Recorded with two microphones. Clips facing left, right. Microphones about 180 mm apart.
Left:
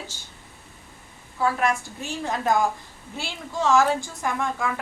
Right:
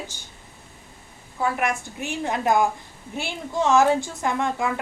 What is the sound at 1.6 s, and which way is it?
A woman's voice, 20° right (ahead or behind).